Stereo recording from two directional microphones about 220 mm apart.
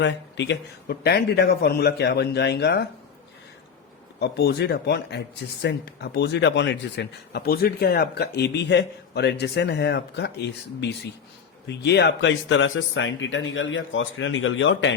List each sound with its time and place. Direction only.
0.0 s speech: 55° left (ahead or behind)
4.2 s speech: 50° left (ahead or behind)
11.8 s speech: 50° left (ahead or behind)